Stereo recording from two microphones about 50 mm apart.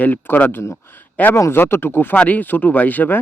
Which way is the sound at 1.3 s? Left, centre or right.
Left.